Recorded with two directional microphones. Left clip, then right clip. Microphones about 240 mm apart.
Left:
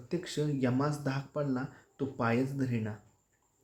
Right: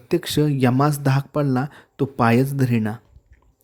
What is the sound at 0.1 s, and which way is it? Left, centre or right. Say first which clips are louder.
Speech: right 13 dB; right.